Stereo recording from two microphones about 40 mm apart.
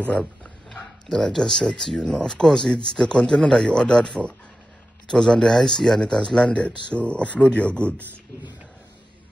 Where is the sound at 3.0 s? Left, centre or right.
Left.